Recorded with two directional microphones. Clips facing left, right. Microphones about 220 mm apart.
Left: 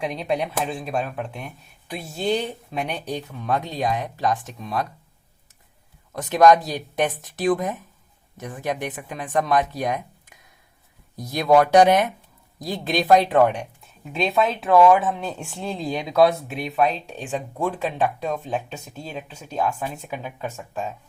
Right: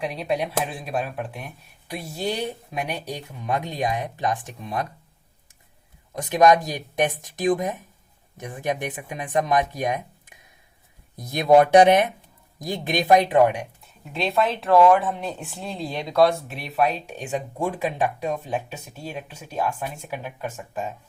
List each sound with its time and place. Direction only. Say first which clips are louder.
0.0 s speech: left 1 dB; 5° right (ahead or behind); by 4.9 s 20° right (ahead or behind)
6.1 s speech: left 2 dB; 15° right (ahead or behind)
11.3 s speech: right 1 dB; 20° right (ahead or behind)
13.8 s speech: left 3 dB; centre (ahead or behind)